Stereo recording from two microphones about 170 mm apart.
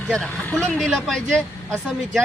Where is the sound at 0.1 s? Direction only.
5° left (ahead or behind).